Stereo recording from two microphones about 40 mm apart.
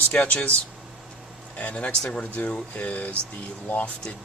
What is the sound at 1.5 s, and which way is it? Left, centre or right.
Speech, left.